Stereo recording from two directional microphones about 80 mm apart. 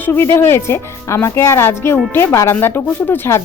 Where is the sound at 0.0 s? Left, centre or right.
Left.